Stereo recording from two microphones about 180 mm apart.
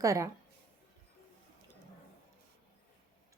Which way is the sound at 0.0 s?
15° right (ahead or behind).